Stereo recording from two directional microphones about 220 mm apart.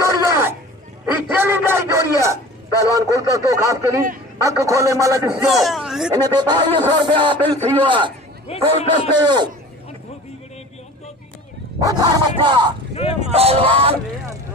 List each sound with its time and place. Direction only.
0.0 s a sound: 10° right (ahead or behind)
2.7 s a sound: 15° left (ahead or behind)
3.0 s speech: 15° right (ahead or behind)
5.5 s speech: centre (ahead or behind)
6.1 s a man's voice: 20° right (ahead or behind)
8.5 s a man's voice: 25° left (ahead or behind)
9.1 s a man's voice: 20° right (ahead or behind)
11.8 s a man's voice: 20° right (ahead or behind)
12.9 s speech: 25° left (ahead or behind)
13.2 s a man's voice: 30° right (ahead or behind)